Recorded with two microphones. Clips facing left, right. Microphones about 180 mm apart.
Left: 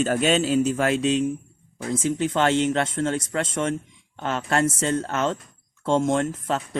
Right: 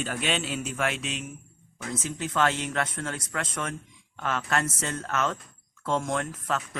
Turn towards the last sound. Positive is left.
turn(degrees=25)  # may be behind; listen again after turning